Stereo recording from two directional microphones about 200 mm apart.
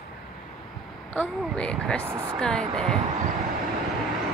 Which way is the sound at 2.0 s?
10° right (ahead or behind).